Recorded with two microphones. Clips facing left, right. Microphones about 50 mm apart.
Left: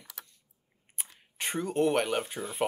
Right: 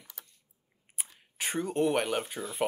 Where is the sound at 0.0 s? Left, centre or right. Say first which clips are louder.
Left 4 dB; left.